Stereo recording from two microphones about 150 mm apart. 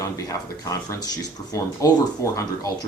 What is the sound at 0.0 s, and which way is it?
Speech, 20° left (ahead or behind).